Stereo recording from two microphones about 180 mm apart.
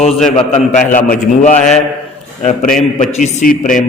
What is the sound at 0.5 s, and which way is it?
A man's voice, 45° left (ahead or behind).